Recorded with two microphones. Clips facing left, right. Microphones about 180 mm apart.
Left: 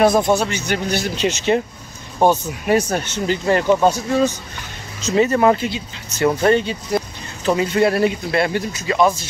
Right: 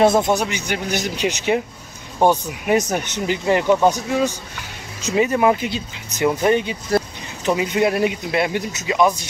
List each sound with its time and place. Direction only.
0.0 s speech: 20° right (ahead or behind)